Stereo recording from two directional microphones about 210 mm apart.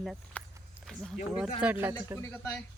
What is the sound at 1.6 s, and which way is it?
Speech, 10° right (ahead or behind).